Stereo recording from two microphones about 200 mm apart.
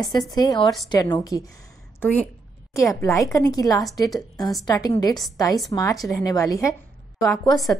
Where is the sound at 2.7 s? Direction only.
15° left (ahead or behind).